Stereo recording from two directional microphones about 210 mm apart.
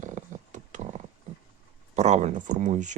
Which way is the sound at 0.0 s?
35° right (ahead or behind).